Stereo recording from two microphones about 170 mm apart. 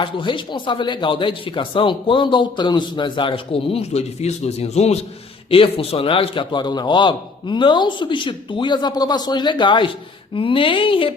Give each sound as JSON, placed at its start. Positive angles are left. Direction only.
{"t": 0.0, "sound": "speech", "side_deg": 30}